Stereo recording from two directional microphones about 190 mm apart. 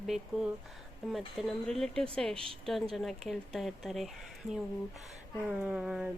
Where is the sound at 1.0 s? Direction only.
Centre (ahead or behind).